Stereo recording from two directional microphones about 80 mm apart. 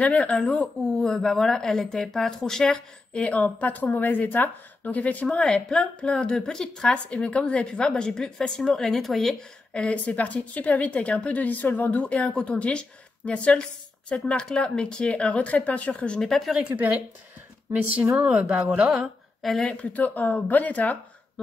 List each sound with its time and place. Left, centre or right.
0.0 s a woman's voice: centre
9.8 s a woman's voice: centre
17.8 s speech: centre
19.4 s speech: centre
19.7 s speech: centre